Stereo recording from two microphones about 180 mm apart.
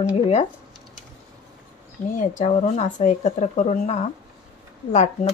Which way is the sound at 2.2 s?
40° left (ahead or behind).